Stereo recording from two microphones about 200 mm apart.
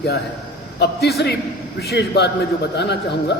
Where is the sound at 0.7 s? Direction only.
55° left (ahead or behind).